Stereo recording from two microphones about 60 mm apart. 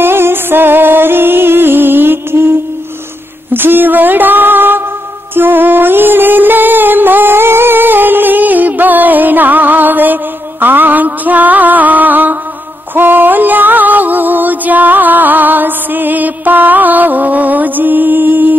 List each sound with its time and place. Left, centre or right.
0.0 s music: right
3.5 s a sound: right
5.3 s music: right